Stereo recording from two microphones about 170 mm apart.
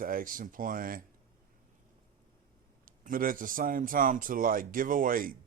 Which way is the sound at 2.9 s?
55° right (ahead or behind).